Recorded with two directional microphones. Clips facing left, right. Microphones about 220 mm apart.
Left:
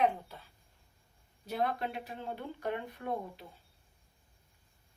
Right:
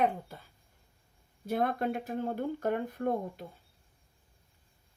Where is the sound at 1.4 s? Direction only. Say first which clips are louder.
Right 4 dB; 50° right (ahead or behind).